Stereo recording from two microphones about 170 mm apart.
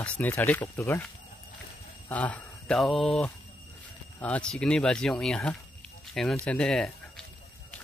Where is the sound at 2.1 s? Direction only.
10° left (ahead or behind).